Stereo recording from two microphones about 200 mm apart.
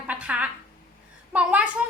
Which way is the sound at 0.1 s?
5° right (ahead or behind).